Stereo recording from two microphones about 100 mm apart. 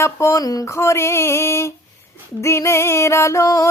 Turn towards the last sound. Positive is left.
turn(degrees=35)  # may be behind; listen again after turning